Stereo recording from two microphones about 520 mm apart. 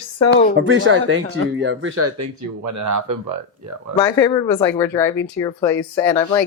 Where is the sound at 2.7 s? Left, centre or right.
Right.